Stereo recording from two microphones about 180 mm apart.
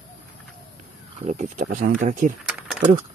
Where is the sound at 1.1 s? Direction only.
40° right (ahead or behind).